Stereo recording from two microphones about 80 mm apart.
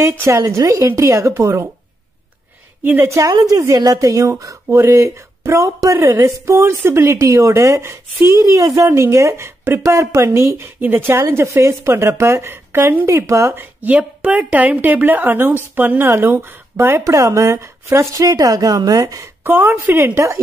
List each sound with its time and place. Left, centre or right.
0.0 s a woman's voice: right
3.0 s a woman's voice: right
4.6 s a woman's voice: right
17.0 s a woman's voice: right
19.4 s a woman's voice: right